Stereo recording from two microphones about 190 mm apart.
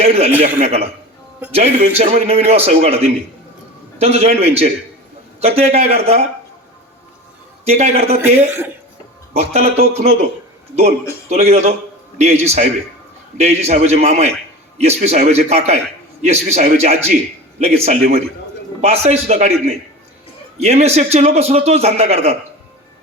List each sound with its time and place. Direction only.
0.0 s a man's voice: 35° right (ahead or behind)
7.7 s a man's voice: 35° right (ahead or behind)
8.2 s a man's voice: 10° right (ahead or behind)
9.3 s a man's voice: 35° right (ahead or behind)
11.3 s a man's voice: 35° right (ahead or behind)